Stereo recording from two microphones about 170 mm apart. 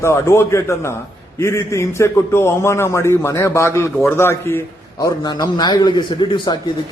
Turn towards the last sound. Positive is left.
turn(degrees=25)  # may be behind; listen again after turning